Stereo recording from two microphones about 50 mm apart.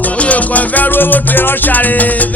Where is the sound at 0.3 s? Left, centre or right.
Left.